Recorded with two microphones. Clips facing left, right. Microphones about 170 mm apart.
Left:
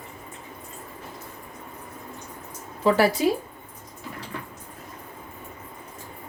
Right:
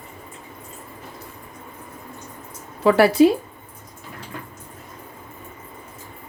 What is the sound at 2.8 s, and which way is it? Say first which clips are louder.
Speech: right 4 dB; 65° right (ahead or behind).